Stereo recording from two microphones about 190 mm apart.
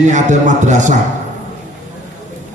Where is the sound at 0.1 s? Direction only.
40° right (ahead or behind).